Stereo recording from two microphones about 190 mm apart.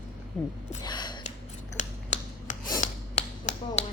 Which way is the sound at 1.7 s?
40° left (ahead or behind).